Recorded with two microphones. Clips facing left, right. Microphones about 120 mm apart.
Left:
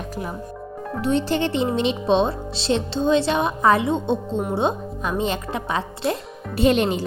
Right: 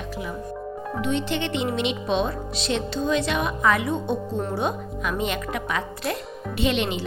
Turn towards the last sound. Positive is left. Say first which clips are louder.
# left 5 dB
turn(degrees=40)  # may be behind; listen again after turning